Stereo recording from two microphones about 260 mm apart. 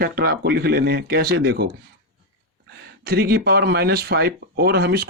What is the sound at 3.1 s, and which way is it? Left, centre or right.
Speech, right.